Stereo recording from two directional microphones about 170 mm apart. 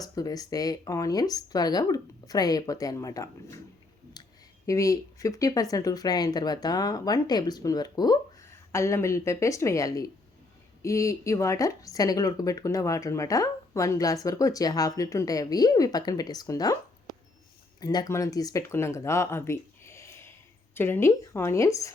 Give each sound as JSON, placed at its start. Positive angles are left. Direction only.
{"t": 0.0, "sound": "speech", "side_deg": 20}
{"t": 17.7, "sound": "a woman's voice", "side_deg": 20}